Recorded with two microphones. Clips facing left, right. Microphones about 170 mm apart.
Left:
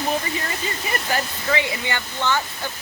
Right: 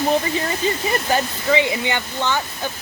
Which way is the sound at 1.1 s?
20° right (ahead or behind).